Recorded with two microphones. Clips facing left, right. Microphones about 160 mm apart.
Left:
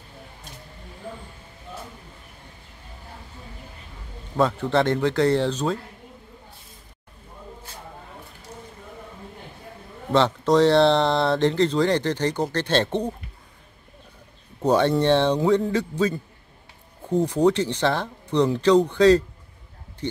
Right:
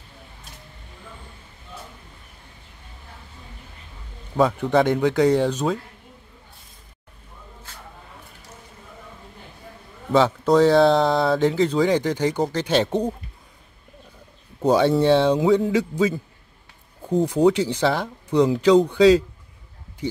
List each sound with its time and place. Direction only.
4.4 s speech: 10° right (ahead or behind)
10.1 s speech: 5° right (ahead or behind)
14.6 s speech: 5° right (ahead or behind)